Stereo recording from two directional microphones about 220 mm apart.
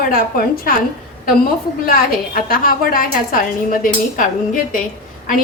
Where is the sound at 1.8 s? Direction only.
40° left (ahead or behind).